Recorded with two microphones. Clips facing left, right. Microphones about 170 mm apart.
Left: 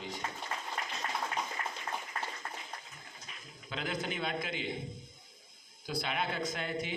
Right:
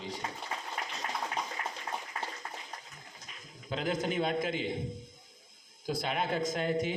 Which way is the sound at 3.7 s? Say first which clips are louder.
Right 5 dB; 45° right (ahead or behind).